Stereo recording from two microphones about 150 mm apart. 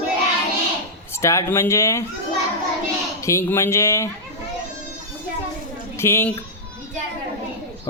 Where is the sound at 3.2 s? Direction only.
20° left (ahead or behind).